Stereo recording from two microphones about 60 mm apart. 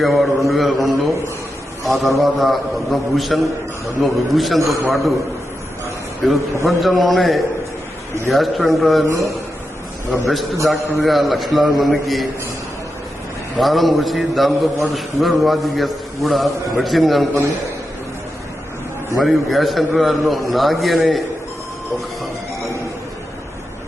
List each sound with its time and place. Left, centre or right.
0.0 s a man's voice: centre
6.2 s a man's voice: centre
9.0 s speech: right
10.1 s a man's voice: centre
13.6 s a man's voice: centre
19.1 s a man's voice: centre